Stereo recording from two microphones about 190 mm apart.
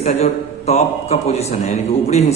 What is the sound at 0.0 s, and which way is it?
A man's voice, 35° left (ahead or behind).